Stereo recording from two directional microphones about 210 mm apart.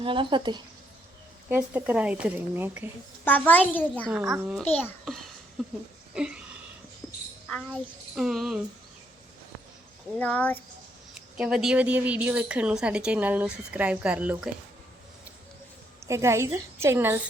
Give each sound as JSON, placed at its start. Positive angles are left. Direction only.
{"t": 0.0, "sound": "a woman's voice", "side_deg": -25}
{"t": 1.5, "sound": "speech", "side_deg": -10}
{"t": 3.2, "sound": "a child's voice", "side_deg": 5}
{"t": 7.7, "sound": "speech", "side_deg": -5}
{"t": 10.2, "sound": "a child's voice", "side_deg": 5}
{"t": 16.0, "sound": "speech", "side_deg": -15}